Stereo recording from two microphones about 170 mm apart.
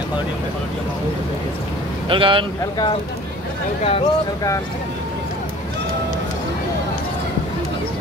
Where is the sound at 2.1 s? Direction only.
30° right (ahead or behind).